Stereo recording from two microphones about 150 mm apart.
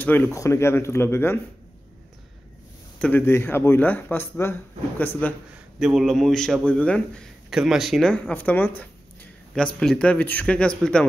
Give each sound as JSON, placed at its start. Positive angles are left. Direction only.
{"t": 0.0, "sound": "speech", "side_deg": 15}
{"t": 3.0, "sound": "speech", "side_deg": 15}
{"t": 5.8, "sound": "a man's voice", "side_deg": -5}
{"t": 9.8, "sound": "speech", "side_deg": 5}